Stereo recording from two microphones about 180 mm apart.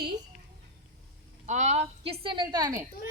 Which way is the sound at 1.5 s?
40° right (ahead or behind).